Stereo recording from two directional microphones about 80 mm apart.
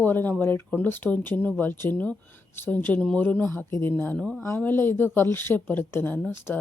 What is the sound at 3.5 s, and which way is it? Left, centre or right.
A woman's voice, left.